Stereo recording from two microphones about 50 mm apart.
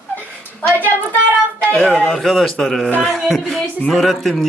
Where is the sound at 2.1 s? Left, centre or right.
Centre.